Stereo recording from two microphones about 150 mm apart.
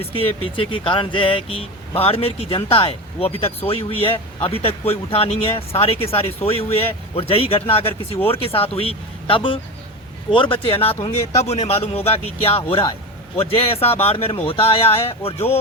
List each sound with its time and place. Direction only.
0.0 s speech: 40° left (ahead or behind)